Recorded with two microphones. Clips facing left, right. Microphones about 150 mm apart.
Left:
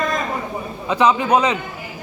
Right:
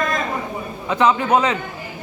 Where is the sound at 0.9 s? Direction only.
15° left (ahead or behind).